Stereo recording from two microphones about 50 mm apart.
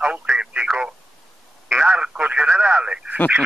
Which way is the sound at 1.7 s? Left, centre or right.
Right.